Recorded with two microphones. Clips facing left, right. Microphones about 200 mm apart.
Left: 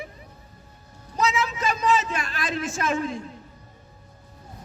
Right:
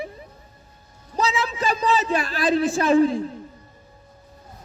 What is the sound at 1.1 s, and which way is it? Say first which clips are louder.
Speech: right 1 dB; 30° right (ahead or behind).